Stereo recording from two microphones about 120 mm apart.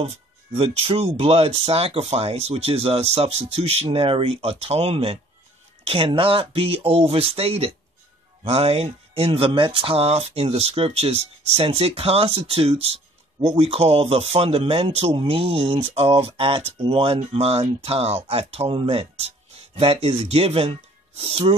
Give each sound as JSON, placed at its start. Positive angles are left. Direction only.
{"t": 0.6, "sound": "speech", "side_deg": -55}